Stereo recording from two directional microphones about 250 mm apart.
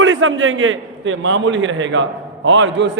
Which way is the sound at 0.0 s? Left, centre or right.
Right.